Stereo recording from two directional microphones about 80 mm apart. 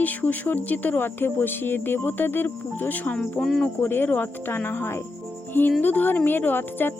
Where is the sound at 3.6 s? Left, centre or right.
Left.